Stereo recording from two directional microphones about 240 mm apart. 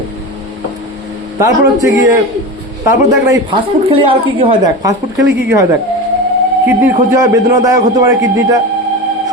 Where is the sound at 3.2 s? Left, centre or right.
Centre.